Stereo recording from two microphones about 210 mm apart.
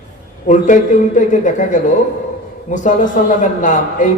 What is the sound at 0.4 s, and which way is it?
Speech, 35° left (ahead or behind).